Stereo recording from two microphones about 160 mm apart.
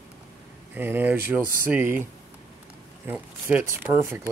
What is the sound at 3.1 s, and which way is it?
Speech, 10° right (ahead or behind).